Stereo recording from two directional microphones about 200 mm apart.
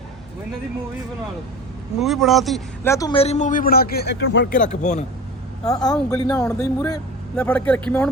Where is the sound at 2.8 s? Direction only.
15° left (ahead or behind).